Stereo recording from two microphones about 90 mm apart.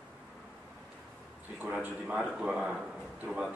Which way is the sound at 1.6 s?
20° right (ahead or behind).